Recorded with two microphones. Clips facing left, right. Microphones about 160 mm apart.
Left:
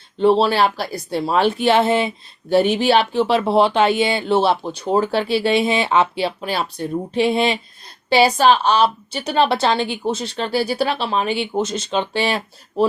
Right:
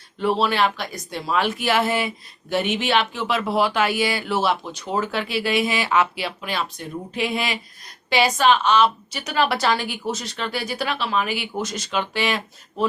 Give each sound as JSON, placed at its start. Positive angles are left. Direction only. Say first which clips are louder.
{"t": 0.2, "sound": "speech", "louder": "left 6 dB", "side_deg": 30}